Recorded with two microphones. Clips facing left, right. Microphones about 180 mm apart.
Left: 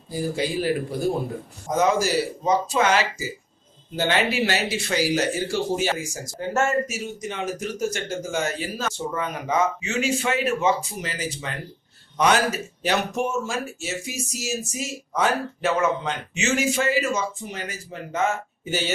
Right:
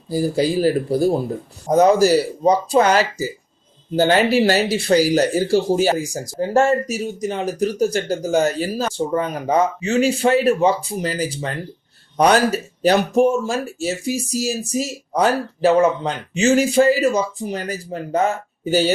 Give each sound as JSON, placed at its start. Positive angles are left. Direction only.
{"t": 0.1, "sound": "speech", "side_deg": -35}